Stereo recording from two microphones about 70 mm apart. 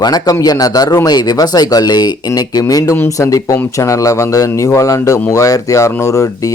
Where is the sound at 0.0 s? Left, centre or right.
Left.